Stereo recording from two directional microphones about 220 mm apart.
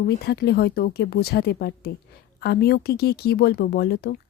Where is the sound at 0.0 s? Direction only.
45° left (ahead or behind).